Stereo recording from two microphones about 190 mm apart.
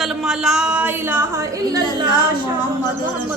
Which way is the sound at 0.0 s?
Centre (ahead or behind).